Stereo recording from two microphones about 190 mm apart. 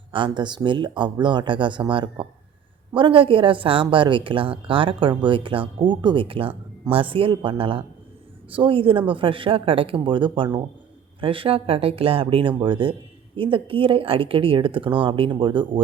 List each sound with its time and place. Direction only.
0.3 s speech: 25° right (ahead or behind)